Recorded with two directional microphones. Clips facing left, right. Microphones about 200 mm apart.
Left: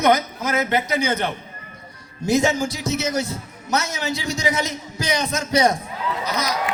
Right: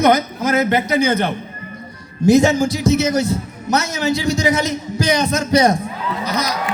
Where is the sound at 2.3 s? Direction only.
70° right (ahead or behind).